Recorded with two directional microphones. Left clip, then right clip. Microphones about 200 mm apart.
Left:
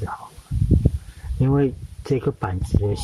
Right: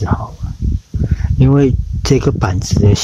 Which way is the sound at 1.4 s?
45° right (ahead or behind).